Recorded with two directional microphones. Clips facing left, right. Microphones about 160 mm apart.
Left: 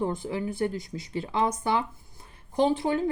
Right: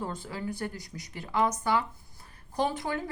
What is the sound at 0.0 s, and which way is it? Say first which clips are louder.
Speech: left 6 dB; 20° left (ahead or behind).